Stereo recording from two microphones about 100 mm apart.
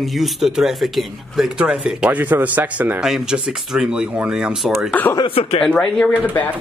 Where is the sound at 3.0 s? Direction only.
5° right (ahead or behind).